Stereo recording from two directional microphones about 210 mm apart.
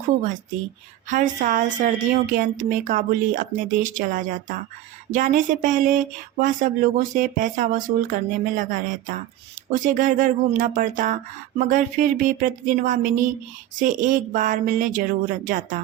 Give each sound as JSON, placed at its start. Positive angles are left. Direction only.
{"t": 1.1, "sound": "speech", "side_deg": -40}